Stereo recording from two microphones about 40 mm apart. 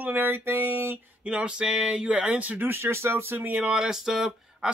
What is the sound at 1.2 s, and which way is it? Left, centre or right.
Speech, right.